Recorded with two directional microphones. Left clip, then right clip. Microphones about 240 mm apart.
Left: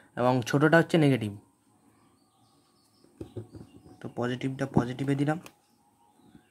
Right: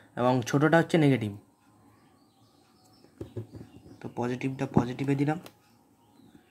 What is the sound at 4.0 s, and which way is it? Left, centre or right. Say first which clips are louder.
Speech: even; centre.